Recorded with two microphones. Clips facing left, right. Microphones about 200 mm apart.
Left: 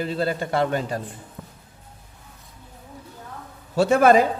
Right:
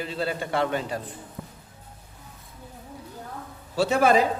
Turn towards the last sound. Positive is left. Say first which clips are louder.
# left 5 dB
turn(degrees=50)  # may be behind; listen again after turning